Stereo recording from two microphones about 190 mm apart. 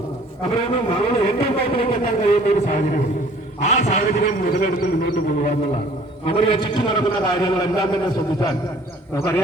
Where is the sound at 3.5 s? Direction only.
40° left (ahead or behind).